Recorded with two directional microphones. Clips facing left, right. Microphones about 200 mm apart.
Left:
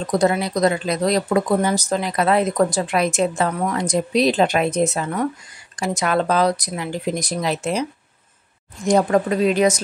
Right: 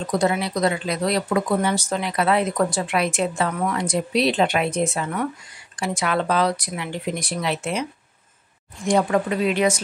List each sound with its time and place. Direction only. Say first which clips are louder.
0.2 s speech: left 4 dB; 40° left (ahead or behind)
8.8 s speech: left 3 dB; 40° left (ahead or behind)